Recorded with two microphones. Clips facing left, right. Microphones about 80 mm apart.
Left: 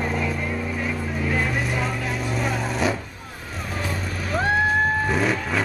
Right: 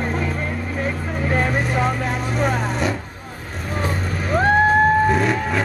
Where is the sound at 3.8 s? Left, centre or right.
Right.